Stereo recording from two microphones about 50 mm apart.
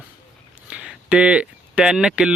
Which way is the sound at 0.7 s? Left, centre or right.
Right.